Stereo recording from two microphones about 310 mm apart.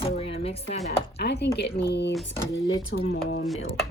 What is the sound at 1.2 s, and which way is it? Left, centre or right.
Speech, left.